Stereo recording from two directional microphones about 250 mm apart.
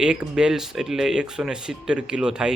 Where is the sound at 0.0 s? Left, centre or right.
Centre.